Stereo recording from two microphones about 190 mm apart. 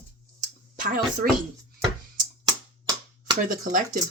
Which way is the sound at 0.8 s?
50° right (ahead or behind).